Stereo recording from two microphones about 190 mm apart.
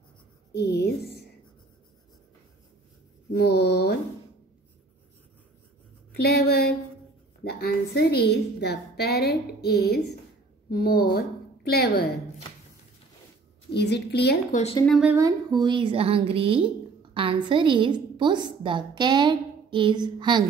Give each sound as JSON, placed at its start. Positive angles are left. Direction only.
{"t": 0.5, "sound": "a woman's voice", "side_deg": 55}
{"t": 3.3, "sound": "a woman's voice", "side_deg": 60}
{"t": 6.1, "sound": "a woman's voice", "side_deg": 55}
{"t": 13.7, "sound": "a woman's voice", "side_deg": 60}
{"t": 14.5, "sound": "speech", "side_deg": 35}
{"t": 14.9, "sound": "speech", "side_deg": -5}
{"t": 15.1, "sound": "a woman's voice", "side_deg": -20}